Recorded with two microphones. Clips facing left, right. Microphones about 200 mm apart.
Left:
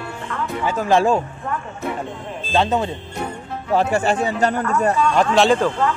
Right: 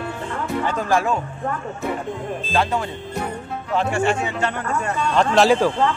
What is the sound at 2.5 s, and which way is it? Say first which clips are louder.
Speech: left 4 dB; 20° left (ahead or behind).